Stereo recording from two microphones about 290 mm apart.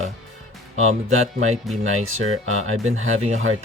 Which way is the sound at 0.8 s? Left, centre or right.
Right.